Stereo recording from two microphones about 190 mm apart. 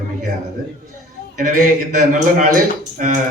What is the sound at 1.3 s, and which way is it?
Speech, 45° right (ahead or behind).